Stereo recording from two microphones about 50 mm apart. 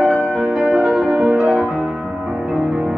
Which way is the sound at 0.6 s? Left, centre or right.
Centre.